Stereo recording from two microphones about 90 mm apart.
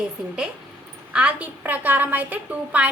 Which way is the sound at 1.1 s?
15° right (ahead or behind).